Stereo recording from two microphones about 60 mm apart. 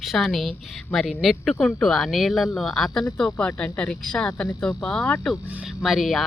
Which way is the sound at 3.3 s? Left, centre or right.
Centre.